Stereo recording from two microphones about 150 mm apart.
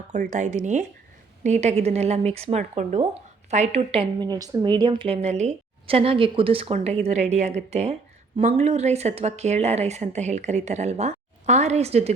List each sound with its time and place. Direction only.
0.3 s speech: 55° right (ahead or behind)